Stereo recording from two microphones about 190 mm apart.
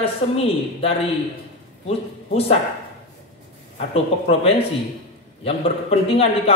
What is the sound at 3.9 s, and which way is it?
A man's voice, 30° left (ahead or behind).